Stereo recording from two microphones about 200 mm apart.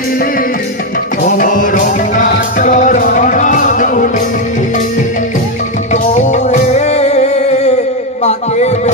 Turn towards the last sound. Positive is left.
turn(degrees=35)  # may be behind; listen again after turning